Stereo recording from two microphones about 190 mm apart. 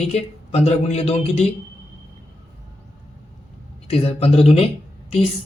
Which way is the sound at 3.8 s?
30° left (ahead or behind).